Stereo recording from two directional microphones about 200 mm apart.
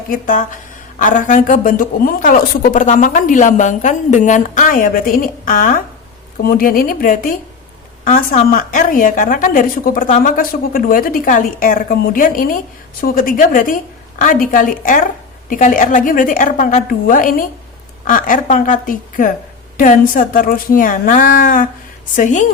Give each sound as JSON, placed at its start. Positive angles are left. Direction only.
{"t": 0.1, "sound": "a woman's voice", "side_deg": 40}